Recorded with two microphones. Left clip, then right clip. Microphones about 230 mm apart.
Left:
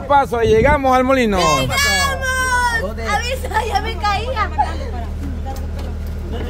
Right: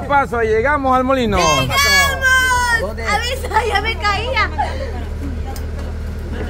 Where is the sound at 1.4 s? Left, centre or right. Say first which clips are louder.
Right 1 dB; centre.